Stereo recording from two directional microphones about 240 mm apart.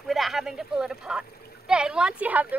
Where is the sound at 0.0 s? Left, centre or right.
Centre.